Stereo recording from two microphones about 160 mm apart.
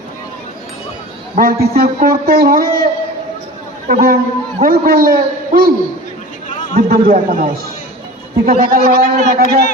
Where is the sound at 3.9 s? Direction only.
70° right (ahead or behind).